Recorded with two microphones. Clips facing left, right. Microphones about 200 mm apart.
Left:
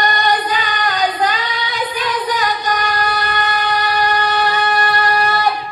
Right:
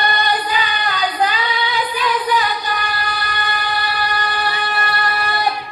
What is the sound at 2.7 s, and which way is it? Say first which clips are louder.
Train: left 5 dB; 40° left (ahead or behind).